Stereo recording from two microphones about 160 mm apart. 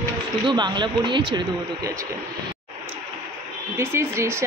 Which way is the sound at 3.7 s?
15° right (ahead or behind).